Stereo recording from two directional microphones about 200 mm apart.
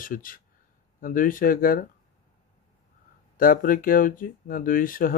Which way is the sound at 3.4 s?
45° left (ahead or behind).